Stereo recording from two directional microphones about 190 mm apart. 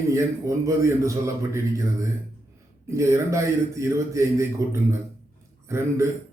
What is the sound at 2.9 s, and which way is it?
A man's voice, 15° right (ahead or behind).